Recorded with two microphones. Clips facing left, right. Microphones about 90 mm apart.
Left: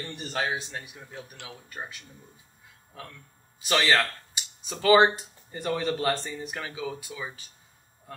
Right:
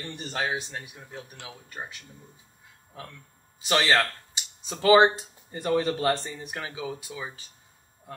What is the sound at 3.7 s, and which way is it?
Speech, 20° right (ahead or behind).